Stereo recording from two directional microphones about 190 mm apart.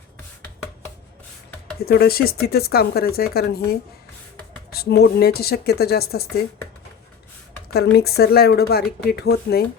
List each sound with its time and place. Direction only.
1.8 s speech: 55° left (ahead or behind)
7.9 s speech: 60° left (ahead or behind)